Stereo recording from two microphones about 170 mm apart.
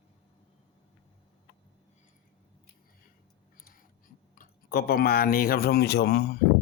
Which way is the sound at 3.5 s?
55° left (ahead or behind).